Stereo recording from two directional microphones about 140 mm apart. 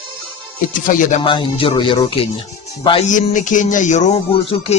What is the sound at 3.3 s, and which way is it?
Speech, 65° left (ahead or behind).